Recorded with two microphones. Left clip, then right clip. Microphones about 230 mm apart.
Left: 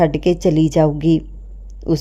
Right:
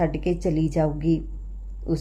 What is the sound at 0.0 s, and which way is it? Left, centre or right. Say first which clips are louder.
A man's voice: left 9 dB; left.